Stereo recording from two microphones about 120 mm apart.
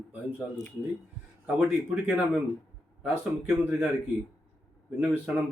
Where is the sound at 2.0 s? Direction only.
10° right (ahead or behind).